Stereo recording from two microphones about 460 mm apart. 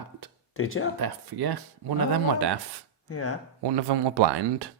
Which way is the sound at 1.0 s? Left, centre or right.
Right.